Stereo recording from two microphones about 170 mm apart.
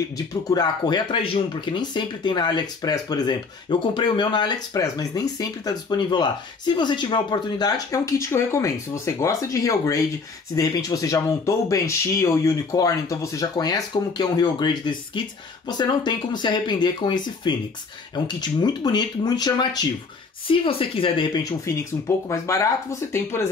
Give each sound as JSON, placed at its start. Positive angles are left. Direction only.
{"t": 0.3, "sound": "speech", "side_deg": 25}